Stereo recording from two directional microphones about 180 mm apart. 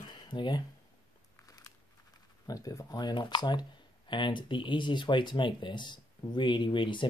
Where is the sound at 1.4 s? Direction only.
20° left (ahead or behind).